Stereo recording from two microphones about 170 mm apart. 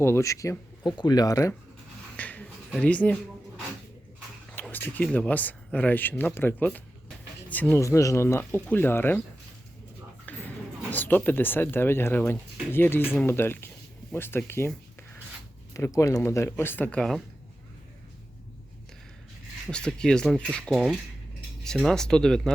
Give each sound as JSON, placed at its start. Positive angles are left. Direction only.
{"t": 0.0, "sound": "speech", "side_deg": 15}
{"t": 2.1, "sound": "a sound", "side_deg": 10}
{"t": 4.5, "sound": "speech", "side_deg": 10}
{"t": 10.3, "sound": "a sound", "side_deg": 10}
{"t": 10.9, "sound": "speech", "side_deg": 10}
{"t": 19.7, "sound": "speech", "side_deg": 5}